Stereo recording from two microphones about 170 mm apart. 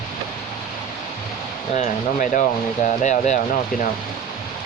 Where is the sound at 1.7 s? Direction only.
45° left (ahead or behind).